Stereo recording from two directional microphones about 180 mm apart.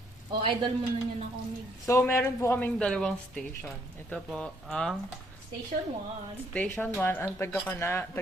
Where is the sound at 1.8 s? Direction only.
15° left (ahead or behind).